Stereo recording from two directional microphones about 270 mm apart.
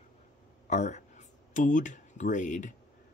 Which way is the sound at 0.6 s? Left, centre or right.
Left.